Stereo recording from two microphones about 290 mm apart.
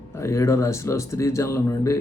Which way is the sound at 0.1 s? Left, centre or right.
Centre.